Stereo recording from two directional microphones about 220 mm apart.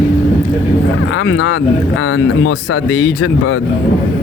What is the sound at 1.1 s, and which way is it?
Speech, 60° left (ahead or behind).